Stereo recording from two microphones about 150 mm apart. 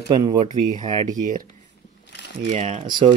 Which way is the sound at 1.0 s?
60° right (ahead or behind).